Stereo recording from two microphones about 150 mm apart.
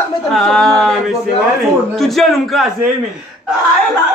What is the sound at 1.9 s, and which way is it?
Speech, centre (ahead or behind).